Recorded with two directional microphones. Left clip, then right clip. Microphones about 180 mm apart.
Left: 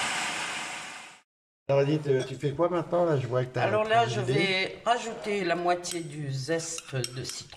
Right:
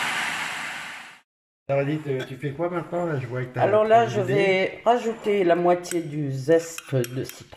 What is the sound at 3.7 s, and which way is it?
A man's voice, 35° right (ahead or behind).